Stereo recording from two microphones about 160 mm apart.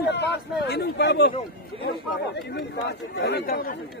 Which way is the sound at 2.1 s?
90° left.